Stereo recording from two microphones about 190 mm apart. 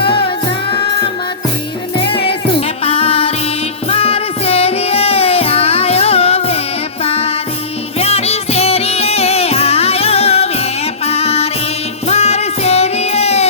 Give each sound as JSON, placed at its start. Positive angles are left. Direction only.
{"t": 2.0, "sound": "music", "side_deg": 30}